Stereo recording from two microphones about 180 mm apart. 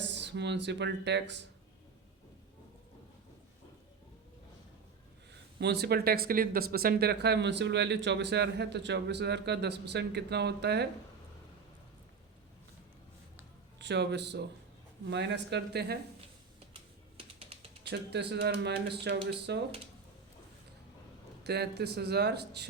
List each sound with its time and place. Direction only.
0.0 s speech: 75° right (ahead or behind)
5.5 s speech: 65° right (ahead or behind)
13.7 s a man's voice: 70° right (ahead or behind)
17.4 s typing: 30° right (ahead or behind)
17.8 s speech: 65° right (ahead or behind)
21.4 s speech: 65° right (ahead or behind)